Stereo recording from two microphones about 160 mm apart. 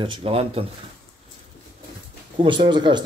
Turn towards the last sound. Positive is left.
turn(degrees=-30)  # may be behind; listen again after turning